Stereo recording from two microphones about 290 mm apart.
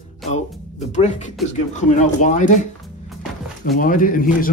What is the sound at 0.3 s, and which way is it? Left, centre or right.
A man's voice, left.